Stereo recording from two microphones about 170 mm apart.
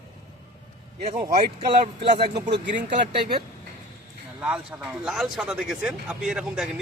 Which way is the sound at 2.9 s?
55° right (ahead or behind).